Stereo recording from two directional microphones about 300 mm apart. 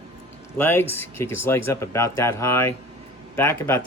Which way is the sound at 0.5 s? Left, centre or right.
Centre.